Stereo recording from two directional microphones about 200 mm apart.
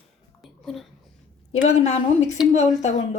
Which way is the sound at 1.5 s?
35° left (ahead or behind).